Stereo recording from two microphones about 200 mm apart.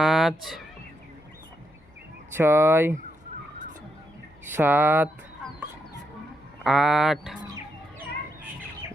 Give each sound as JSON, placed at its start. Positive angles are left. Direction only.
{"t": 0.0, "sound": "speech", "side_deg": 0}
{"t": 2.3, "sound": "speech", "side_deg": -10}
{"t": 4.5, "sound": "speech", "side_deg": -10}
{"t": 6.7, "sound": "speech", "side_deg": 0}
{"t": 7.4, "sound": "chicken", "side_deg": -20}